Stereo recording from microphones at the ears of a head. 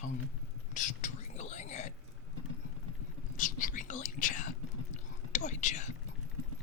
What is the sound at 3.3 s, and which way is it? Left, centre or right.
Whispering, left.